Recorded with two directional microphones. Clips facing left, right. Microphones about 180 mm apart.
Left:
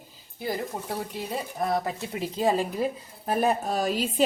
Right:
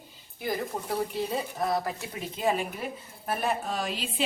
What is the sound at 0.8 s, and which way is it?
Speech, 10° left (ahead or behind).